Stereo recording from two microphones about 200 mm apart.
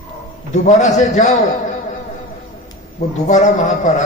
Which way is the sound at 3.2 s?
35° left (ahead or behind).